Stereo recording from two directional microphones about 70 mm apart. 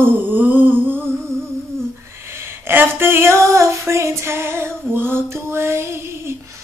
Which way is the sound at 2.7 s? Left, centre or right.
Right.